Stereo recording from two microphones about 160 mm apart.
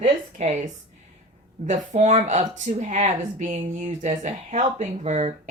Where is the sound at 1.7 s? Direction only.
45° right (ahead or behind).